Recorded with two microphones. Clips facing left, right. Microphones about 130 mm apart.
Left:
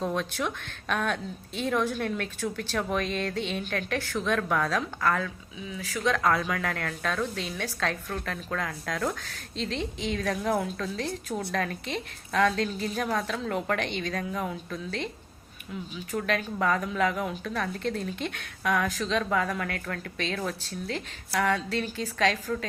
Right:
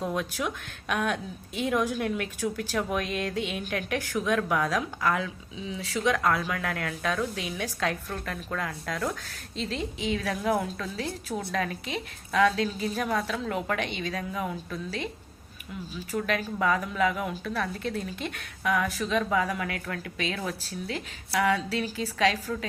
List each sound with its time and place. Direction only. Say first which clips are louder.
0.0 s a woman's voice: left 1 dB; 5° right (ahead or behind)
5.5 s speech: right 3 dB; 25° right (ahead or behind)
6.0 s a woman's voice: right 1 dB; 15° right (ahead or behind)
6.2 s a woman's voice: left 1 dB; centre (ahead or behind)